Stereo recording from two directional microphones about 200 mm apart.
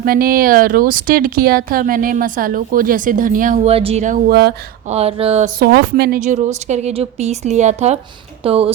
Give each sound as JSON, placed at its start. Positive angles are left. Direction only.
{"t": 0.0, "sound": "speech", "side_deg": -45}
{"t": 4.3, "sound": "speech", "side_deg": -55}
{"t": 4.9, "sound": "a woman's voice", "side_deg": -30}
{"t": 5.5, "sound": "speech", "side_deg": -55}
{"t": 6.1, "sound": "a woman's voice", "side_deg": -35}